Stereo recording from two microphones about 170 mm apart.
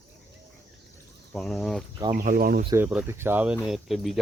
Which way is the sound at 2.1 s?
55° right (ahead or behind).